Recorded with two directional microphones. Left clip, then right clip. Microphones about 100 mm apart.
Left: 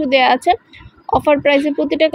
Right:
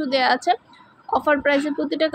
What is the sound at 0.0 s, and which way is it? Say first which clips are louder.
Speech: left 7 dB; 40° left (ahead or behind).